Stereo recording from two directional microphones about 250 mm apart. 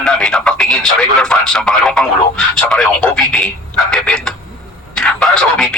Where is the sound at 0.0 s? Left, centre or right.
Centre.